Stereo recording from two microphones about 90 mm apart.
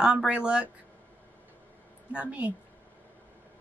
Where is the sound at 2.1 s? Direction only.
15° right (ahead or behind).